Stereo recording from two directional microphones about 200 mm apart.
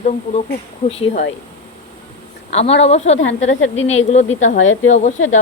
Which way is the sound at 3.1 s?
70° left (ahead or behind).